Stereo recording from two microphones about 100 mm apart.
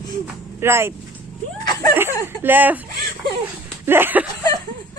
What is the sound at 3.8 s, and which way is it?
Speech, 20° right (ahead or behind).